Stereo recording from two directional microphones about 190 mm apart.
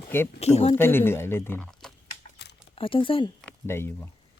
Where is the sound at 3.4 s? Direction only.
10° left (ahead or behind).